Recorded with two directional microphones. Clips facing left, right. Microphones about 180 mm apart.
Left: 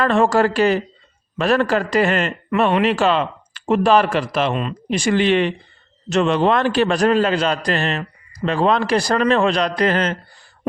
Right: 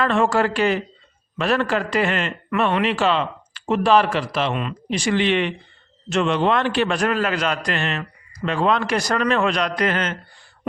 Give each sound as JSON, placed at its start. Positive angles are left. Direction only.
{"t": 0.0, "sound": "a man's voice", "side_deg": 40}